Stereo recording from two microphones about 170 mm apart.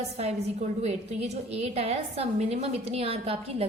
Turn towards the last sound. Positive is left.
turn(degrees=-35)  # may be behind; listen again after turning